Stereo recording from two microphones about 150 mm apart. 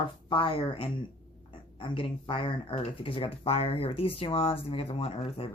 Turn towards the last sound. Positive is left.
turn(degrees=40)  # may be behind; listen again after turning